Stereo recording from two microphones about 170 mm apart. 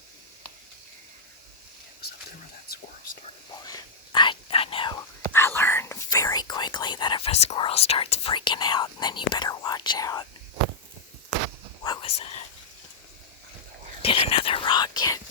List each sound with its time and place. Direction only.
3.7 s whispering: 25° left (ahead or behind)
11.8 s whispering: 25° left (ahead or behind)
14.0 s whispering: 30° left (ahead or behind)